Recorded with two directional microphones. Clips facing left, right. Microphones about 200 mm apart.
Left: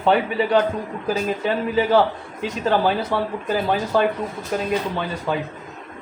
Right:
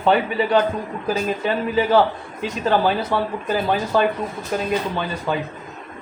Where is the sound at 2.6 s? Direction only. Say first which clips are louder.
Right 1 dB; 50° left (ahead or behind).